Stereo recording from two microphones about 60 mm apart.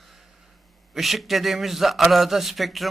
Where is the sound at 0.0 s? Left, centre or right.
Centre.